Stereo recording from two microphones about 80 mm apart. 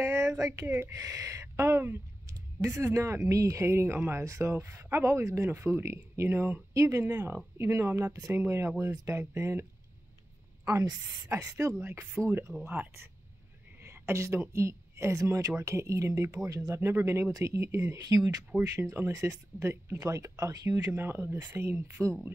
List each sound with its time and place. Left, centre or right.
0.0 s speech: right
6.7 s speech: right
7.0 s speech: right
10.6 s a woman's voice: right
11.5 s speech: right
13.7 s a woman's voice: right
17.3 s speech: right
20.9 s speech: right